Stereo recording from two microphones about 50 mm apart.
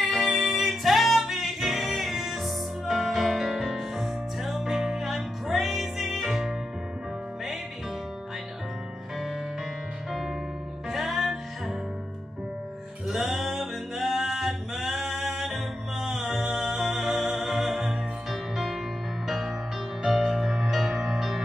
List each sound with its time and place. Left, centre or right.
0.0 s music: centre
10.9 s music: centre
13.1 s music: centre